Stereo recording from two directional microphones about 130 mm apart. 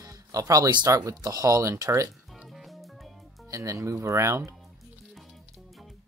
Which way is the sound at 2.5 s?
Centre (ahead or behind).